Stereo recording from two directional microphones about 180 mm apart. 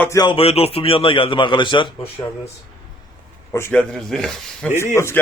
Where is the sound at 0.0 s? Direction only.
20° left (ahead or behind).